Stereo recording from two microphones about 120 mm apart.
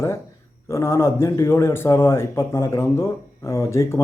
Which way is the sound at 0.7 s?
20° left (ahead or behind).